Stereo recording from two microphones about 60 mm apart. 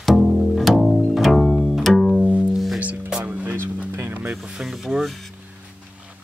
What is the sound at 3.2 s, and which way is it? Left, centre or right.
Music, right.